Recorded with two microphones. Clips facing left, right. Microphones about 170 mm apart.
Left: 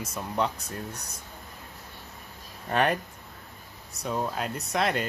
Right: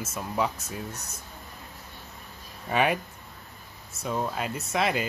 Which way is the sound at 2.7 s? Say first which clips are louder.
Even; 5° right (ahead or behind).